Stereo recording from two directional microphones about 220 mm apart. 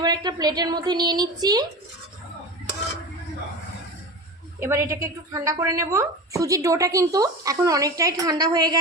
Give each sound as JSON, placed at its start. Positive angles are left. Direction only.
{"t": 0.0, "sound": "a woman's voice", "side_deg": -20}
{"t": 4.6, "sound": "a woman's voice", "side_deg": -15}